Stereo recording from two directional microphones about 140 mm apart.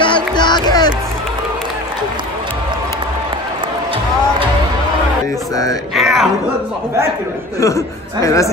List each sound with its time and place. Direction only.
0.0 s music: 35° left (ahead or behind)
5.9 s music: centre (ahead or behind)
7.6 s speech: 25° left (ahead or behind)